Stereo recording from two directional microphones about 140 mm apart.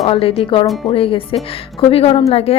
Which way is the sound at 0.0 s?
45° left (ahead or behind).